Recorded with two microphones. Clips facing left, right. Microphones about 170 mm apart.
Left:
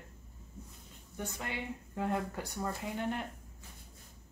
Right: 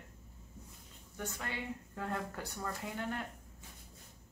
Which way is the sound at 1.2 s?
20° left (ahead or behind).